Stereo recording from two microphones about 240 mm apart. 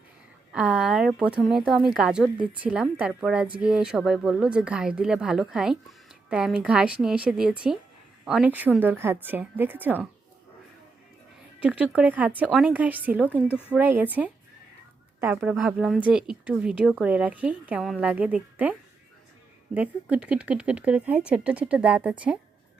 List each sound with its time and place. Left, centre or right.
0.5 s a woman's voice: centre
11.6 s a woman's voice: centre
15.4 s speech: centre